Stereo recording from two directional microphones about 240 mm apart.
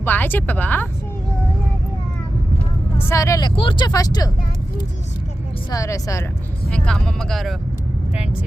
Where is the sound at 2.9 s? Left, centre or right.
Centre.